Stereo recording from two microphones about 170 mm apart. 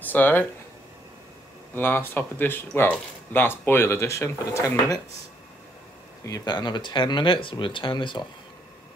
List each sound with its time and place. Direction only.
0.0 s speech: 10° left (ahead or behind)
1.8 s speech: 10° left (ahead or behind)
6.2 s speech: 20° left (ahead or behind)